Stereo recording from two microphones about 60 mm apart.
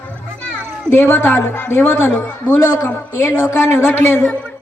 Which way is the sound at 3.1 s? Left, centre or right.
Left.